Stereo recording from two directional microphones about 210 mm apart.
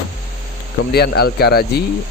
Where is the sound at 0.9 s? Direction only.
50° left (ahead or behind).